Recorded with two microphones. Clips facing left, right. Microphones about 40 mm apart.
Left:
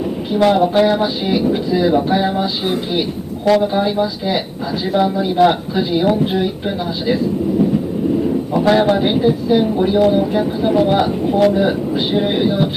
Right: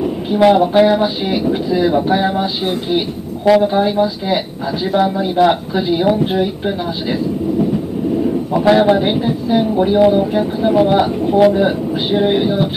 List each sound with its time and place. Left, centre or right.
0.3 s speech: centre
3.4 s speech: centre
8.5 s speech: centre